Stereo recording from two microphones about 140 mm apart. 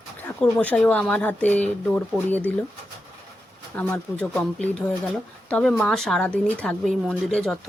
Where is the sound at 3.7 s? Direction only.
10° left (ahead or behind).